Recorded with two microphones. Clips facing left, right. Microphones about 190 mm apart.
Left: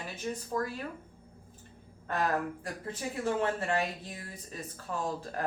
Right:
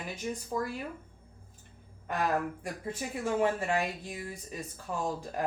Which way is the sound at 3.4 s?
10° right (ahead or behind).